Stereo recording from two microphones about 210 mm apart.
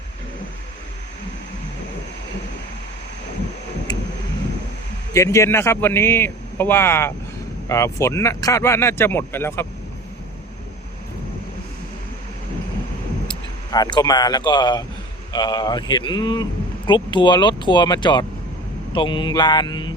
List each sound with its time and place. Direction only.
3.9 s vehicle: 20° left (ahead or behind)
5.1 s speech: 15° left (ahead or behind)
13.2 s speech: 20° left (ahead or behind)